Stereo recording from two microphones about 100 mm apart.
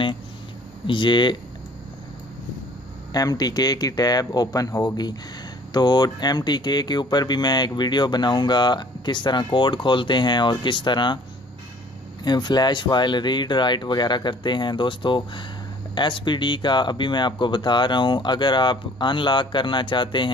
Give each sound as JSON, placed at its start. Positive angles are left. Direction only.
{"t": 0.8, "sound": "speech", "side_deg": 55}
{"t": 3.1, "sound": "speech", "side_deg": 40}
{"t": 12.2, "sound": "speech", "side_deg": 45}